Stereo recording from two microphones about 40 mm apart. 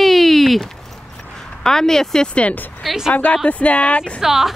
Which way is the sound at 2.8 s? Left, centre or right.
Centre.